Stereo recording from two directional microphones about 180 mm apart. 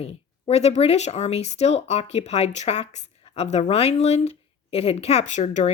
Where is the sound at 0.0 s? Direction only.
35° left (ahead or behind).